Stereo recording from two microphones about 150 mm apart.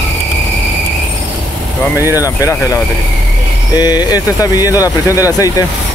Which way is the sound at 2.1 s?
25° left (ahead or behind).